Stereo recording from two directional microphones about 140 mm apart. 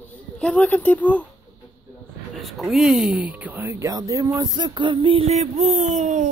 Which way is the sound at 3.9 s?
25° right (ahead or behind).